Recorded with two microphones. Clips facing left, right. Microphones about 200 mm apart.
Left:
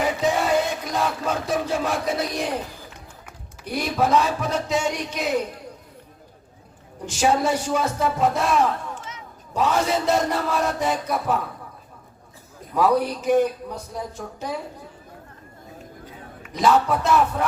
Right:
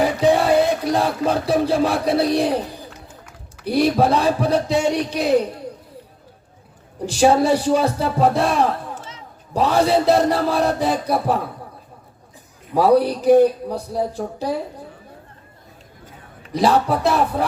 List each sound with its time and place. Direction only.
0.0 s music: 35° right (ahead or behind)
3.7 s speech: 35° right (ahead or behind)
7.0 s speech: 35° right (ahead or behind)
12.7 s speech: 35° right (ahead or behind)
16.4 s speech: 35° right (ahead or behind)